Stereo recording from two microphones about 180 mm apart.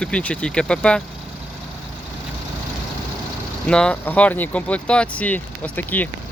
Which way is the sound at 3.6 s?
5° left (ahead or behind).